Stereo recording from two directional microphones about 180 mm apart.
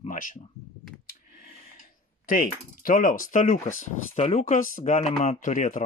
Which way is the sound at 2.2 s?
50° left (ahead or behind).